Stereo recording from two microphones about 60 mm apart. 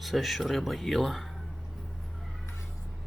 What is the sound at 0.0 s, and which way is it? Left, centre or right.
Speech, centre.